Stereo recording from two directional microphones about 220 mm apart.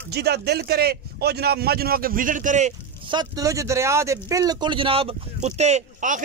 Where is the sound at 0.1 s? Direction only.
50° right (ahead or behind).